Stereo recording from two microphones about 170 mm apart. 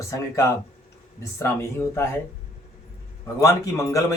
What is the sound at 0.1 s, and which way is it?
Speech, 15° left (ahead or behind).